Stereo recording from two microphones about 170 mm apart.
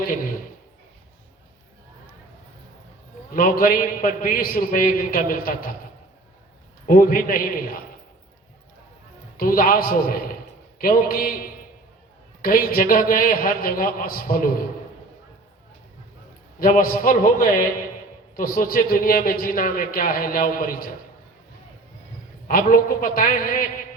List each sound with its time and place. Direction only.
3.3 s a man's voice: 55° left (ahead or behind)
6.8 s a man's voice: 55° left (ahead or behind)
9.4 s a man's voice: 55° left (ahead or behind)
16.6 s a man's voice: 55° left (ahead or behind)
22.4 s a man's voice: 55° left (ahead or behind)